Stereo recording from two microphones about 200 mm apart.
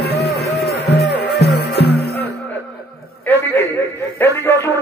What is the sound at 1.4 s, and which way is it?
Music, 55° left (ahead or behind).